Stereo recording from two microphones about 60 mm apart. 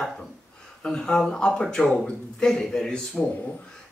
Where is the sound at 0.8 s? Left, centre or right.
Centre.